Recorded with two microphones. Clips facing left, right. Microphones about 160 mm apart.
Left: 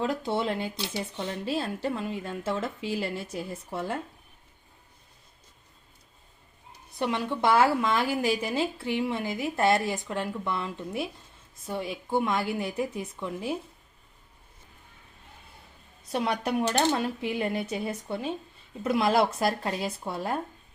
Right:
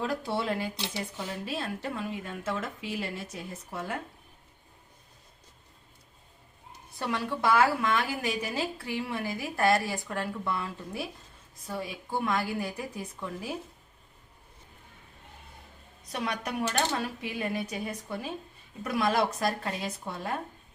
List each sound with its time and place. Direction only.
0.0 s speech: 20° left (ahead or behind)
7.0 s speech: 20° left (ahead or behind)
16.1 s speech: 30° left (ahead or behind)